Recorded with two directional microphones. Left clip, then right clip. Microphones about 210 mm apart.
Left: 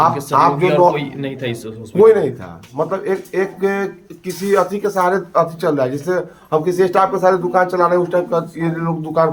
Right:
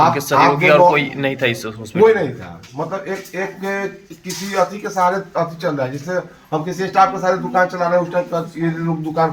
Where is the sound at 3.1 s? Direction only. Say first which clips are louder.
Left 5 dB; 20° left (ahead or behind).